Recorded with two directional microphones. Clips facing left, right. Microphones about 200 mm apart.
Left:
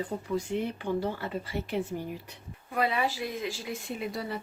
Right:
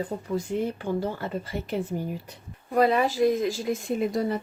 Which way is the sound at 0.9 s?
45° right (ahead or behind).